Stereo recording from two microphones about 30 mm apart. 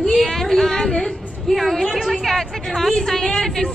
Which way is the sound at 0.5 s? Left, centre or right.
Centre.